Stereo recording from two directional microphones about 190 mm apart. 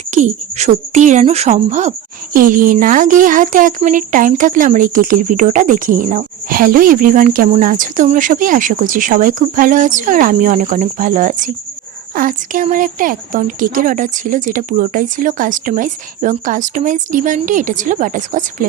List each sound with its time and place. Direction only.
0.1 s speech: 35° right (ahead or behind)